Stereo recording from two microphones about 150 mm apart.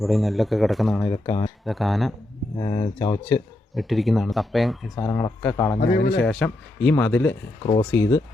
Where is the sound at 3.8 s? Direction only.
Centre (ahead or behind).